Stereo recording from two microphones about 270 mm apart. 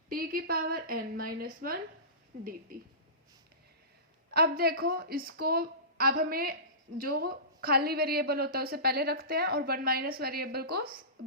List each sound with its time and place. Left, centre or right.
0.1 s a woman's voice: right
4.4 s a woman's voice: right